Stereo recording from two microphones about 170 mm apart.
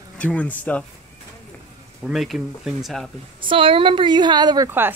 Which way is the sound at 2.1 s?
Centre (ahead or behind).